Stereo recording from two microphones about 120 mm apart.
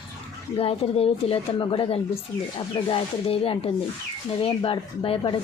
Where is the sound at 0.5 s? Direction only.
55° left (ahead or behind).